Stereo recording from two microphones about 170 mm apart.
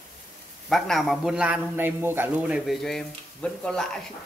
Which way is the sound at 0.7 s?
Centre (ahead or behind).